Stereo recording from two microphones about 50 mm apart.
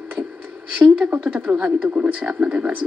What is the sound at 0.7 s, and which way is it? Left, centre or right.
A woman's voice, right.